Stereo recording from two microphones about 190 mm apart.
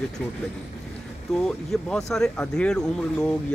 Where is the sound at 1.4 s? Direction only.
5° left (ahead or behind).